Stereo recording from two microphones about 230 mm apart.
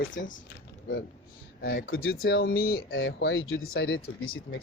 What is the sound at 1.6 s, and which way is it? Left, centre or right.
Speech, left.